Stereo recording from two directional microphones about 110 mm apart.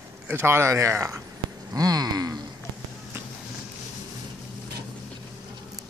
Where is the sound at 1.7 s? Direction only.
35° right (ahead or behind).